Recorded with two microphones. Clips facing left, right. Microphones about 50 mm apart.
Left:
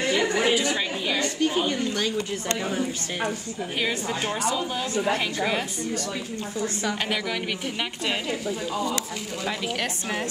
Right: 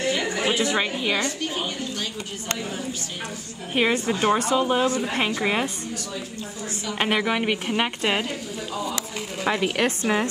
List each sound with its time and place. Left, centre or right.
0.1 s a sound: centre
0.5 s a woman's voice: right
3.7 s a woman's voice: right
4.6 s a woman's voice: right
7.0 s a woman's voice: right
9.4 s a woman's voice: right